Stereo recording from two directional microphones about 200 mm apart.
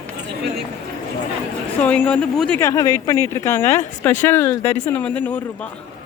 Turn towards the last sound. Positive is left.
turn(degrees=10)  # may be behind; listen again after turning